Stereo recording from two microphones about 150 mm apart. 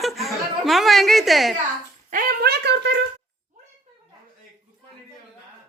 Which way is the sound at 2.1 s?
80° right.